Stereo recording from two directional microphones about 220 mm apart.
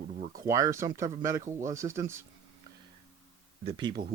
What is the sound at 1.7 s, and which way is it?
Speech, 15° right (ahead or behind).